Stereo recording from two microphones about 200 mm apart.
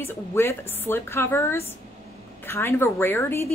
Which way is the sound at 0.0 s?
10° left (ahead or behind).